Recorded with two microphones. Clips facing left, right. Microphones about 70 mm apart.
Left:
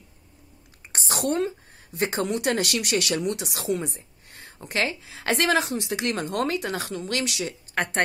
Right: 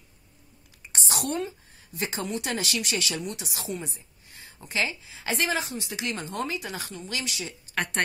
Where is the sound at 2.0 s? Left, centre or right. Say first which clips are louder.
Left 6 dB; left.